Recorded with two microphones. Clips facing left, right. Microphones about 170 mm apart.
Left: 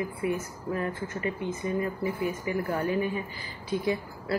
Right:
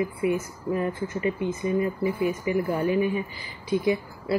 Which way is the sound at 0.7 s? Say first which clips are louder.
Right 4 dB; 20° right (ahead or behind).